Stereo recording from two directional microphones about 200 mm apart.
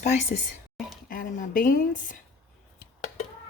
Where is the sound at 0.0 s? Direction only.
35° left (ahead or behind).